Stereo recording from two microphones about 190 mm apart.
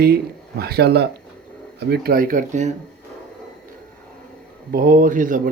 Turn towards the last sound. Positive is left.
turn(degrees=-45)  # may be behind; listen again after turning